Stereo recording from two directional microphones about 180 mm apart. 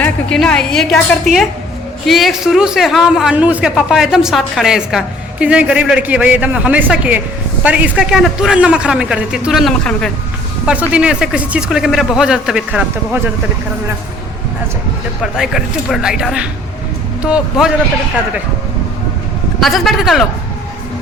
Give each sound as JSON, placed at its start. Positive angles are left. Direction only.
{"t": 0.0, "sound": "a man's voice", "side_deg": 5}
{"t": 15.2, "sound": "a man's voice", "side_deg": 0}
{"t": 19.5, "sound": "a man's voice", "side_deg": 0}